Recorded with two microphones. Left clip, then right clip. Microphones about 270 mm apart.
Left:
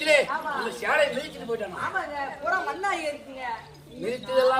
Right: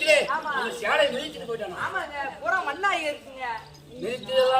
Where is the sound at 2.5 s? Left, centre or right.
Centre.